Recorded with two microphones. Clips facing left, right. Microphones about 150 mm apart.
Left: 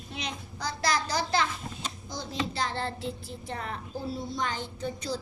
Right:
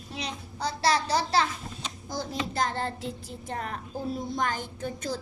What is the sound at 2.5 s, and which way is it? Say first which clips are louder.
A woman's voice: right 3 dB; 45° right (ahead or behind).